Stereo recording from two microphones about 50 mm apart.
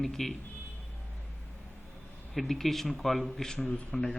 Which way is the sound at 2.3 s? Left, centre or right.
Centre.